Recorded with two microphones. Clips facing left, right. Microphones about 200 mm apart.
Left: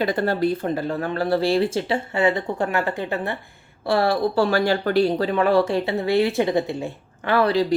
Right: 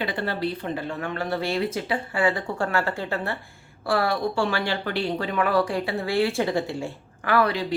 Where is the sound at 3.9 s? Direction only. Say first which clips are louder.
Left 4 dB; 30° left (ahead or behind).